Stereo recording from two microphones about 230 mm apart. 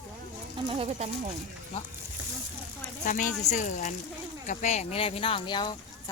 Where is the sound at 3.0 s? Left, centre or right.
Left.